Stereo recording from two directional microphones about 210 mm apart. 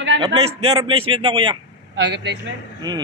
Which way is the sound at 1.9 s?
55° right (ahead or behind).